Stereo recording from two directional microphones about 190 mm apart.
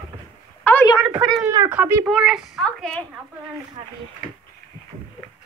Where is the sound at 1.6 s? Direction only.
10° right (ahead or behind).